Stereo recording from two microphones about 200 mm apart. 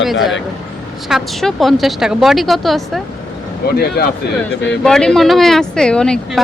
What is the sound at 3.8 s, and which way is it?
Speech, 50° left (ahead or behind).